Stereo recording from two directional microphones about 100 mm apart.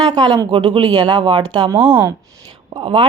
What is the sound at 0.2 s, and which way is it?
Speech, 45° right (ahead or behind).